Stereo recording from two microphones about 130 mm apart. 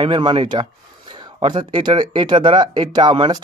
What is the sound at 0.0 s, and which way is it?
Speech, 40° right (ahead or behind).